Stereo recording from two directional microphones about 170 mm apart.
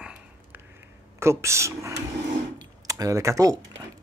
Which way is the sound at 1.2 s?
15° right (ahead or behind).